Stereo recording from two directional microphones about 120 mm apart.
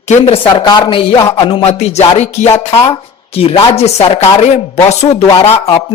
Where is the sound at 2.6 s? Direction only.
55° left (ahead or behind).